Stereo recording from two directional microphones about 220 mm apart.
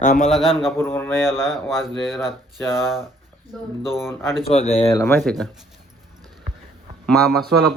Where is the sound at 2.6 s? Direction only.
10° left (ahead or behind).